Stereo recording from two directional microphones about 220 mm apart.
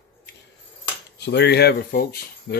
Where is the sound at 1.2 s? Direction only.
50° left (ahead or behind).